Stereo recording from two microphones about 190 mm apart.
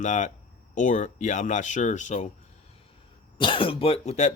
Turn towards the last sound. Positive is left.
turn(degrees=40)  # may be behind; listen again after turning